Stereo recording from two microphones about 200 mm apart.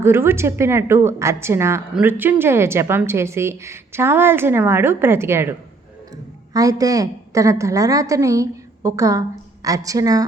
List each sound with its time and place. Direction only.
0.0 s a woman's voice: 10° right (ahead or behind)